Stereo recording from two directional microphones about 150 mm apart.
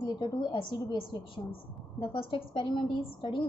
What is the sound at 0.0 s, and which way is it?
A woman's voice, 30° left (ahead or behind).